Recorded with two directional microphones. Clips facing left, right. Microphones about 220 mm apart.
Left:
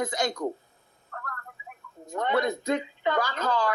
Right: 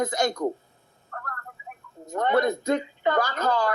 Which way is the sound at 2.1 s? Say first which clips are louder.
Right 3 dB; 45° right (ahead or behind).